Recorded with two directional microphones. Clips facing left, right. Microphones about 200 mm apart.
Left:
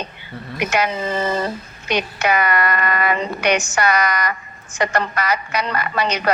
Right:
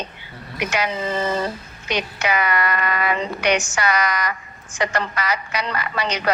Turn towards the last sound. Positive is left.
turn(degrees=55)  # may be behind; listen again after turning